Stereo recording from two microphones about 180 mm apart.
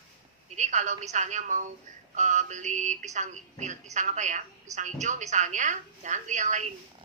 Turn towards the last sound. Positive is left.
turn(degrees=-40)  # may be behind; listen again after turning